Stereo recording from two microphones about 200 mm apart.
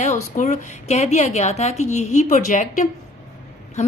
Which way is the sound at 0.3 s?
35° left (ahead or behind).